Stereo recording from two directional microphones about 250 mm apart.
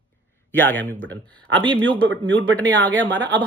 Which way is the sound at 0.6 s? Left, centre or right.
Centre.